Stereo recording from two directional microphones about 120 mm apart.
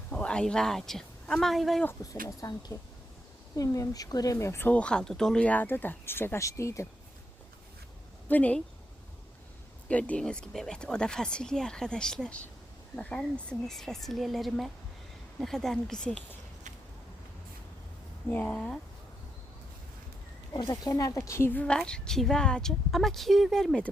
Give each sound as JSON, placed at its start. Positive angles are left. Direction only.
{"t": 0.1, "sound": "a woman's voice", "side_deg": 10}
{"t": 1.8, "sound": "speech", "side_deg": 15}
{"t": 2.4, "sound": "speech", "side_deg": 35}
{"t": 8.3, "sound": "speech", "side_deg": 10}
{"t": 9.9, "sound": "speech", "side_deg": 10}
{"t": 18.3, "sound": "speech", "side_deg": 15}
{"t": 20.5, "sound": "speech", "side_deg": 35}